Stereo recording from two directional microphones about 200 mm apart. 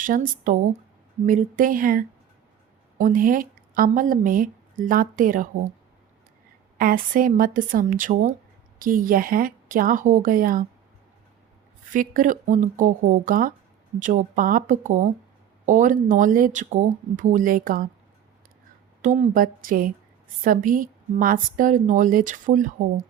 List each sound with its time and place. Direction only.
0.0 s a woman's voice: 40° right (ahead or behind)
6.7 s speech: 45° right (ahead or behind)
11.9 s a woman's voice: 45° right (ahead or behind)
19.0 s a woman's voice: 40° right (ahead or behind)